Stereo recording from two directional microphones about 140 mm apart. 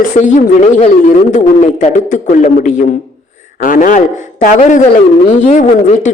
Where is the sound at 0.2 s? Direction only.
60° left (ahead or behind).